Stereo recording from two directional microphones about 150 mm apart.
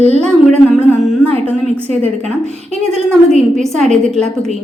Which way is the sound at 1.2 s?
40° right (ahead or behind).